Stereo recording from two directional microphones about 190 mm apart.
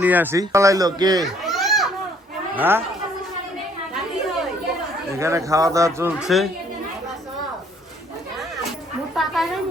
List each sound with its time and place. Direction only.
0.0 s a man's voice: 10° right (ahead or behind)
1.5 s children playing: centre (ahead or behind)
2.6 s a man's voice: 10° right (ahead or behind)
5.1 s a man's voice: 15° right (ahead or behind)
9.1 s speech: centre (ahead or behind)